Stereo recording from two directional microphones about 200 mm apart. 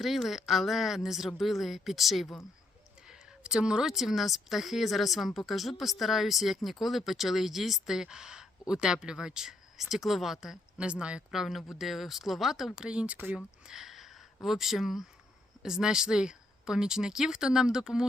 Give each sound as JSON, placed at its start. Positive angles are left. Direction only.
{"t": 0.0, "sound": "speech", "side_deg": 0}